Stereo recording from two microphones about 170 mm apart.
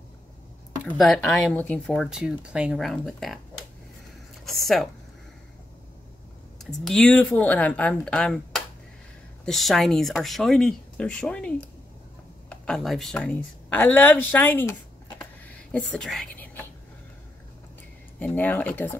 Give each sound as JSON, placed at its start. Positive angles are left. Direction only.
{"t": 0.9, "sound": "speech", "side_deg": 0}
{"t": 2.0, "sound": "speech", "side_deg": -5}
{"t": 4.5, "sound": "a sound", "side_deg": 0}
{"t": 6.6, "sound": "speech", "side_deg": 0}
{"t": 15.1, "sound": "whispering", "side_deg": 10}
{"t": 18.2, "sound": "speech", "side_deg": 10}